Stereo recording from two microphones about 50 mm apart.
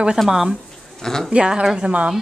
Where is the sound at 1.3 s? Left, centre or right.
Right.